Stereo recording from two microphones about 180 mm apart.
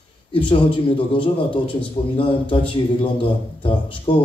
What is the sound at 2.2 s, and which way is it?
Speech, 30° left (ahead or behind).